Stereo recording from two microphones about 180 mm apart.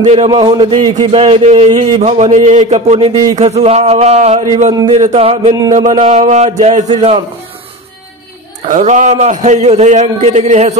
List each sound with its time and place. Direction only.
0.0 s speech: 40° right (ahead or behind)
0.3 s speech: 25° right (ahead or behind)
8.6 s speech: 45° right (ahead or behind)